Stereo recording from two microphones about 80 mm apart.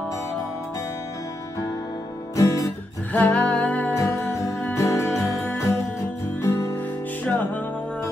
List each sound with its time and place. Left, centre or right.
2.3 s guitar: left
3.1 s music: centre
3.9 s music: left
7.2 s music: centre